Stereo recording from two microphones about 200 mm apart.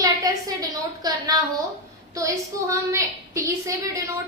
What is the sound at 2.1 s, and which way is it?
A woman's voice, 15° right (ahead or behind).